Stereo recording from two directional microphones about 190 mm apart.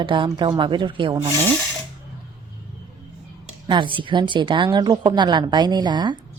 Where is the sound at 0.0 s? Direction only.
25° right (ahead or behind).